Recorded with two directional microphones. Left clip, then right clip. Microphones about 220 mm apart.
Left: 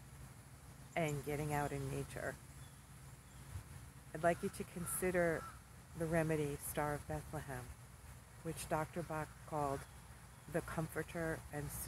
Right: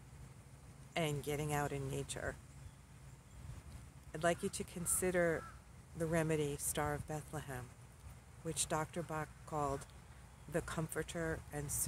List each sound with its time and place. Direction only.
0.9 s speech: 15° right (ahead or behind)
4.1 s speech: 15° right (ahead or behind)
8.6 s speech: 15° right (ahead or behind)